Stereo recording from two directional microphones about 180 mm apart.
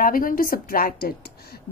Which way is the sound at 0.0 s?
50° left (ahead or behind).